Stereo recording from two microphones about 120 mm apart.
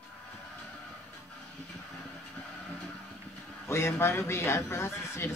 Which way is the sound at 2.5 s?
5° left (ahead or behind).